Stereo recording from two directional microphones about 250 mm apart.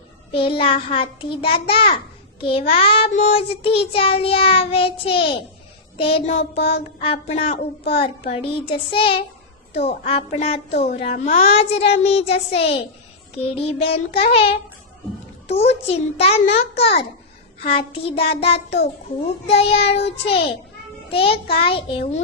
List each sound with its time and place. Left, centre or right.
0.3 s child singing: left